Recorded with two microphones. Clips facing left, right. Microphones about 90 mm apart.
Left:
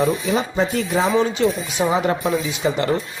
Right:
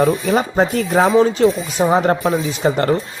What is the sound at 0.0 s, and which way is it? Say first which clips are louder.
Speech: right 4 dB; 50° right (ahead or behind).